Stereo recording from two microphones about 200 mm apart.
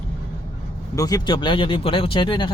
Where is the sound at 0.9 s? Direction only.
20° left (ahead or behind).